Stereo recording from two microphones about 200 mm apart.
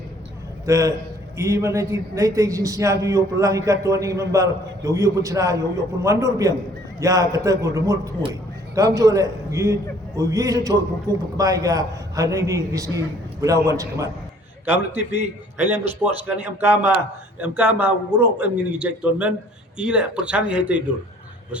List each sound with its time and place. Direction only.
0.6 s a man's voice: 15° right (ahead or behind)